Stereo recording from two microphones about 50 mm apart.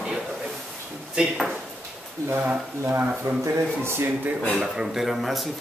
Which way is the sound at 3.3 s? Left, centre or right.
Right.